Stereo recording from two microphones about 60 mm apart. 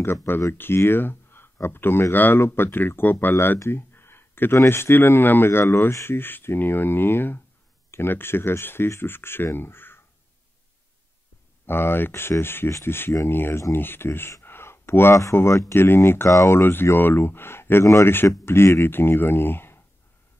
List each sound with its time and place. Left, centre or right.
0.6 s speech: left
3.5 s a sound: left
4.6 s speech: left
11.6 s speech: left
14.4 s a sound: left
15.3 s speech: left